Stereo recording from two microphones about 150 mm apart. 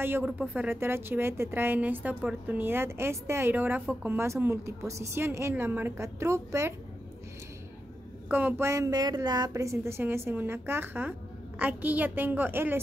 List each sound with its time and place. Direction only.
0.0 s a woman's voice: 10° right (ahead or behind)
8.3 s a woman's voice: 15° right (ahead or behind)